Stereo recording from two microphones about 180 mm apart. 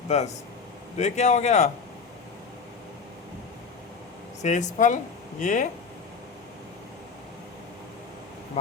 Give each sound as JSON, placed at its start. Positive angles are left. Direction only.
{"t": 0.1, "sound": "a man's voice", "side_deg": 40}
{"t": 4.4, "sound": "speech", "side_deg": 40}